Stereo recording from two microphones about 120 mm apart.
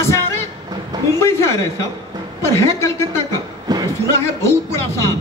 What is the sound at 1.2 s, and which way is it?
Music, 25° left (ahead or behind).